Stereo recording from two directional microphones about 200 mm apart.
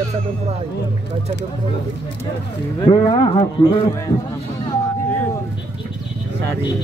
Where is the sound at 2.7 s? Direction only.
20° left (ahead or behind).